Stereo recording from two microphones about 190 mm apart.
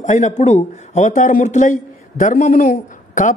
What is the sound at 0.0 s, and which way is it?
A man's voice, 40° left (ahead or behind).